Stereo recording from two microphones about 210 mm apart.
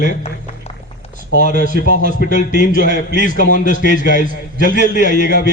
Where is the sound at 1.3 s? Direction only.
35° left (ahead or behind).